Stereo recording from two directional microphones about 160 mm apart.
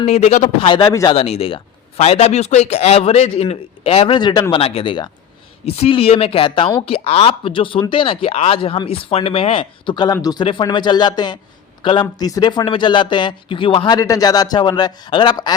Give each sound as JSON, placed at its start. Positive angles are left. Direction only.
{"t": 0.0, "sound": "speech", "side_deg": 40}
{"t": 1.1, "sound": "speech", "side_deg": 40}